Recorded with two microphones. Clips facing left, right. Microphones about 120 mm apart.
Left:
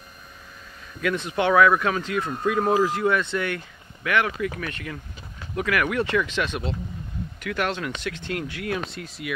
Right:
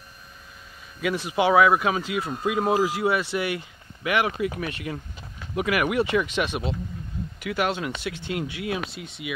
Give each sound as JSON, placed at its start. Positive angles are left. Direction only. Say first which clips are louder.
{"t": 1.0, "sound": "speech", "louder": "right 1 dB", "side_deg": -10}